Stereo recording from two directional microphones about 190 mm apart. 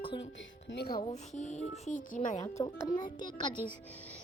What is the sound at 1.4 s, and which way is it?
A child's voice, 35° left (ahead or behind).